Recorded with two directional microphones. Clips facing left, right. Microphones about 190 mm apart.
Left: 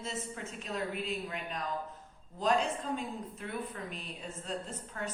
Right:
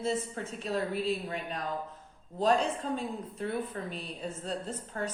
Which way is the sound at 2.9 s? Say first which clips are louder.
Right 3 dB; 35° right (ahead or behind).